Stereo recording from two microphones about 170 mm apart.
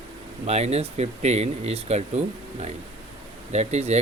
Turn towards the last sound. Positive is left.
turn(degrees=-40)  # may be behind; listen again after turning